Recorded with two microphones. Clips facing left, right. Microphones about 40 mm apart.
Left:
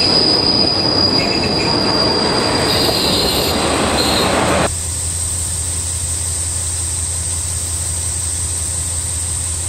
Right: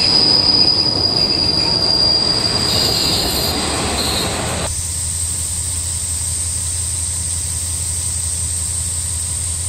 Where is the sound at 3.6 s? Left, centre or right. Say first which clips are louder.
Left 5 dB; left.